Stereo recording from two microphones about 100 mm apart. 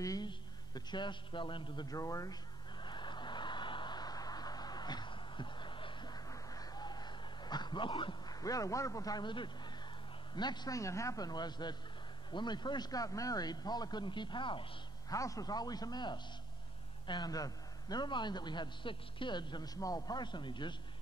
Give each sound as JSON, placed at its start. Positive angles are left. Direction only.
{"t": 0.0, "sound": "speech", "side_deg": 35}
{"t": 0.3, "sound": "a man's voice", "side_deg": 50}
{"t": 1.9, "sound": "a man's voice", "side_deg": 35}
{"t": 2.8, "sound": "a sound", "side_deg": 50}
{"t": 10.3, "sound": "a man's voice", "side_deg": 45}
{"t": 10.8, "sound": "a man's voice", "side_deg": 30}
{"t": 15.0, "sound": "a man's voice", "side_deg": 35}